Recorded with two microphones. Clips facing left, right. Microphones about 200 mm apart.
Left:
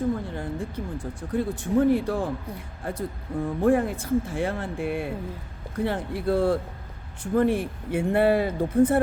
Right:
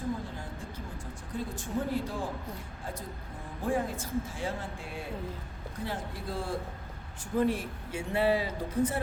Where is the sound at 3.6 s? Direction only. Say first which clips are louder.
Left 9 dB; 60° left (ahead or behind).